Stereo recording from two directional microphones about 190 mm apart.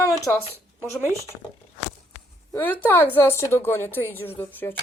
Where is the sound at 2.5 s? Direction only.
10° left (ahead or behind).